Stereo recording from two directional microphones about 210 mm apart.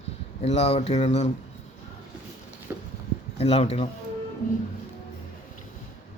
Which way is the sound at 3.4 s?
30° left (ahead or behind).